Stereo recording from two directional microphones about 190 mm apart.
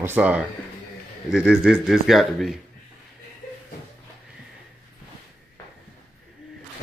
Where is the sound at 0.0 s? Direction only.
10° right (ahead or behind).